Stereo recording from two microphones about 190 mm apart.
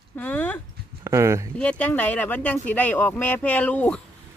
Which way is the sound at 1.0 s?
15° right (ahead or behind).